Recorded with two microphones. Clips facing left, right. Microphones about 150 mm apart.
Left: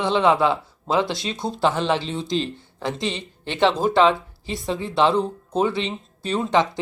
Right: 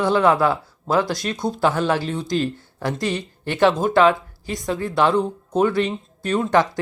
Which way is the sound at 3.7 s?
Centre (ahead or behind).